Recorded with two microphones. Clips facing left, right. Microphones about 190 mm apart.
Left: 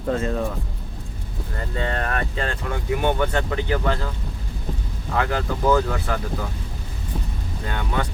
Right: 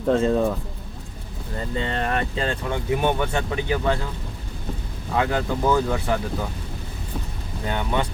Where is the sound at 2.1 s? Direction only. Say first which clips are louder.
Right 2 dB; 25° right (ahead or behind).